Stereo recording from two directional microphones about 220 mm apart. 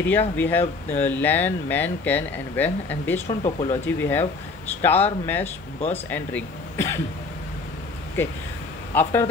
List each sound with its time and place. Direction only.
0.0 s speech: 10° left (ahead or behind)
3.3 s speech: 30° left (ahead or behind)
3.8 s speech: 10° left (ahead or behind)
5.4 s speech: 30° left (ahead or behind)
6.0 s speech: 10° left (ahead or behind)
8.9 s speech: 10° left (ahead or behind)